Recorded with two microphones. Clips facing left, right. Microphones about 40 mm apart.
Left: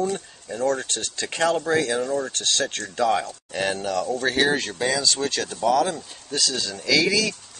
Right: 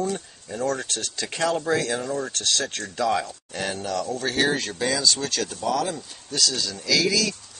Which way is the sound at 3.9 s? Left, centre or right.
Centre.